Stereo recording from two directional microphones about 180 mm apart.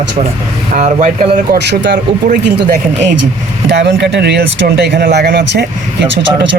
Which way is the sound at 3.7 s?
70° right (ahead or behind).